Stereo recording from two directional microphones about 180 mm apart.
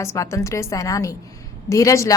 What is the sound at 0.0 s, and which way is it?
A woman's voice, 15° left (ahead or behind).